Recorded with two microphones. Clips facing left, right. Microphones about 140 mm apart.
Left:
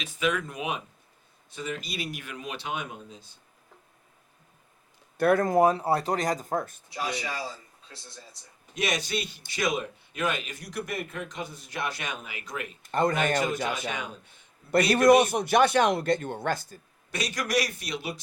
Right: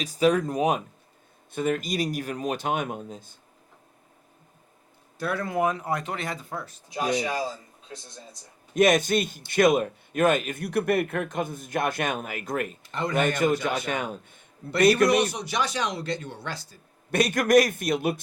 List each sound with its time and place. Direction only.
0.0 s speech: 35° right (ahead or behind)
1.5 s speech: 55° right (ahead or behind)
5.1 s speech: 55° left (ahead or behind)
6.9 s speech: 20° right (ahead or behind)
8.7 s speech: 50° right (ahead or behind)
12.8 s speech: 45° left (ahead or behind)
13.7 s speech: 50° right (ahead or behind)
14.9 s speech: 50° left (ahead or behind)
17.1 s speech: 55° right (ahead or behind)